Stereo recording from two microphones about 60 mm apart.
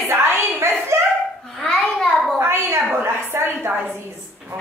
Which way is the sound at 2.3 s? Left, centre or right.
Right.